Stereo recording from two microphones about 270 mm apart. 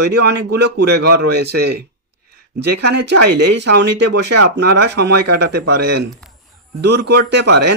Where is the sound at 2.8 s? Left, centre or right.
Right.